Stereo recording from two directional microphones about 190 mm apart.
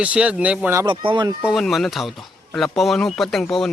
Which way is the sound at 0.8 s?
25° right (ahead or behind).